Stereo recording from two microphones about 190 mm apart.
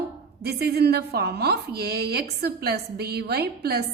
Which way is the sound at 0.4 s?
55° right (ahead or behind).